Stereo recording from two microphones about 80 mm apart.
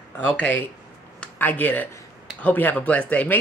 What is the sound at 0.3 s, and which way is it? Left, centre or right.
Speech, centre.